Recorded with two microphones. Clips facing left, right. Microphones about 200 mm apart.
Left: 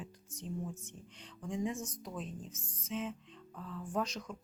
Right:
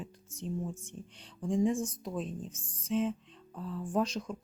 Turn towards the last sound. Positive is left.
turn(degrees=-30)  # may be behind; listen again after turning